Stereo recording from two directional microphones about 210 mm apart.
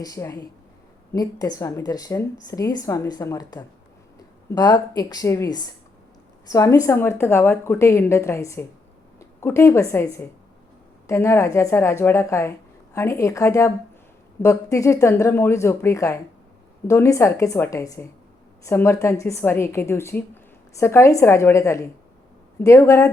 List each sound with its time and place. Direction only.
0.0 s a woman's voice: 15° left (ahead or behind)